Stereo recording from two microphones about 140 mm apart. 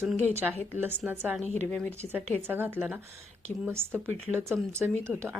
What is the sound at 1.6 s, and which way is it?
Speech, 10° left (ahead or behind).